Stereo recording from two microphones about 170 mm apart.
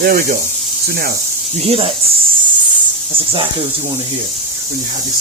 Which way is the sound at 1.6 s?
35° right (ahead or behind).